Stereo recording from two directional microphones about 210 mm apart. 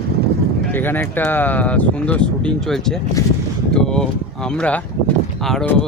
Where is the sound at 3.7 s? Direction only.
5° left (ahead or behind).